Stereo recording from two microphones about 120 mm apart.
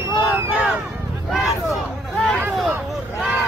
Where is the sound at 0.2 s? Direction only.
15° right (ahead or behind).